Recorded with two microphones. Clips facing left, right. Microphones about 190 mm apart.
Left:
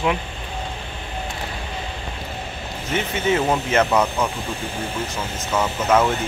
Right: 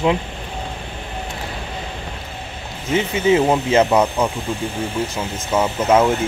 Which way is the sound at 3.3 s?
15° right (ahead or behind).